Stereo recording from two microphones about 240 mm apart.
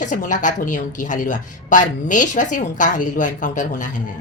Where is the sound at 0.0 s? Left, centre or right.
Left.